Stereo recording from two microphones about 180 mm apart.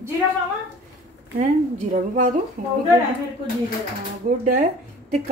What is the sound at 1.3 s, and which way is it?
Speech, 40° right (ahead or behind).